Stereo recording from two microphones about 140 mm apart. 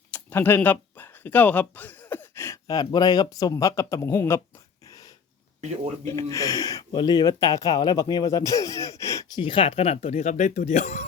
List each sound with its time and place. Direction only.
0.1 s speech: 15° left (ahead or behind)
4.9 s dog: 25° left (ahead or behind)
6.1 s speech: 20° left (ahead or behind)
9.4 s speech: 40° left (ahead or behind); by 11.0 s 55° left (ahead or behind)